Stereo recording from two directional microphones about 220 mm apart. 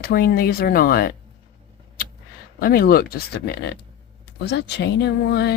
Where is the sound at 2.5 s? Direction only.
40° left (ahead or behind).